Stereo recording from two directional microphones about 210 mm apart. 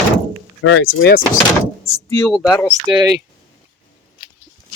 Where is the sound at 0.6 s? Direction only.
70° left (ahead or behind).